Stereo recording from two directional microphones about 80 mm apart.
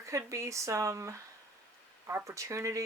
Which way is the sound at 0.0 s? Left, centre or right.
Right.